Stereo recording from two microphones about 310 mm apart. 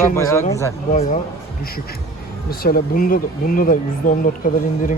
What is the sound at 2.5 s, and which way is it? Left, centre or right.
Speech, left.